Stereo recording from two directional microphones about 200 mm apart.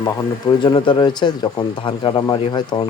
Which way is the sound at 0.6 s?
25° left (ahead or behind).